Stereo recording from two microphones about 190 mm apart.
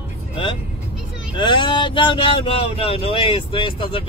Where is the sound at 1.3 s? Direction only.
25° left (ahead or behind).